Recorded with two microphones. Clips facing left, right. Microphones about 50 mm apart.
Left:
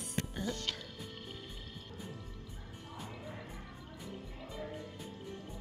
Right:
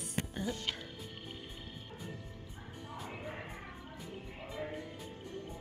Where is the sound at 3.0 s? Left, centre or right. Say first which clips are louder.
Right 4 dB; right.